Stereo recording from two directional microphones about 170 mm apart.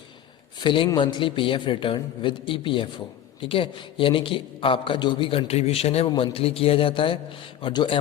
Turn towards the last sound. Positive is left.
turn(degrees=30)  # may be behind; listen again after turning